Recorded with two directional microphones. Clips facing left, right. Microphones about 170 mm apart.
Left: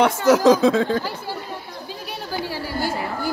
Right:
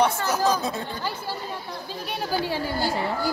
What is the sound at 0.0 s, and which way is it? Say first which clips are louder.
Speech: left 7 dB; 90° left.